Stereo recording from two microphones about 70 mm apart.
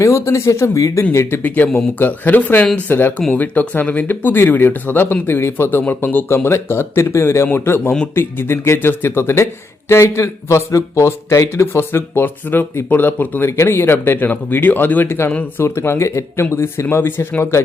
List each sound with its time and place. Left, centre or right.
0.0 s speech: left
1.4 s speech: left